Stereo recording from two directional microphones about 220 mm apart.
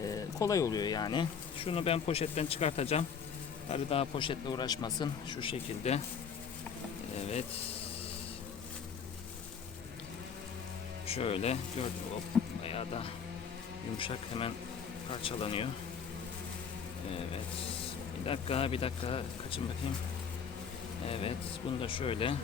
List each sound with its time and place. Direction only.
0.0 s bee: 15° left (ahead or behind)
11.0 s speech: 25° left (ahead or behind)
11.8 s bee: 25° left (ahead or behind)
12.6 s a sound: 25° left (ahead or behind)
14.0 s bee: 25° left (ahead or behind)
18.3 s bee: 25° left (ahead or behind)
21.1 s bee: 25° left (ahead or behind)